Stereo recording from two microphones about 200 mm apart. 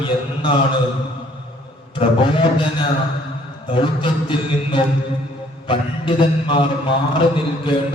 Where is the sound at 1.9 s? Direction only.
25° left (ahead or behind).